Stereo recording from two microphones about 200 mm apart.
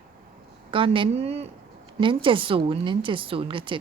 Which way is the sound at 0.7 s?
25° right (ahead or behind).